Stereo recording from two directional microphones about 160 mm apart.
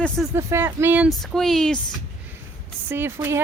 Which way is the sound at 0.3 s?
15° right (ahead or behind).